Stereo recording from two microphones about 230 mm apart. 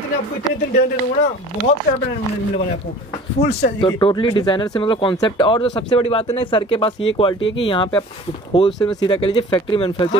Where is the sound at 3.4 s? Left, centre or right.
Left.